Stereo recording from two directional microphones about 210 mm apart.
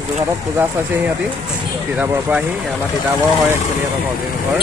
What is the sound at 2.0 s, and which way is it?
Speech, 5° right (ahead or behind).